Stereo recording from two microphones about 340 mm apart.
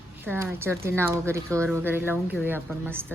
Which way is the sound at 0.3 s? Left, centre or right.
Centre.